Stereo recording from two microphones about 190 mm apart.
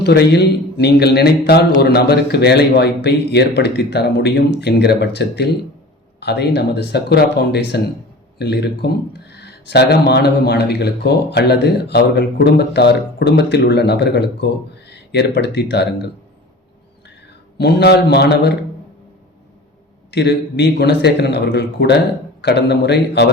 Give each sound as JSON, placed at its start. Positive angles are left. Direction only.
{"t": 0.0, "sound": "speech", "side_deg": 60}
{"t": 17.6, "sound": "speech", "side_deg": 60}
{"t": 20.1, "sound": "speech", "side_deg": 60}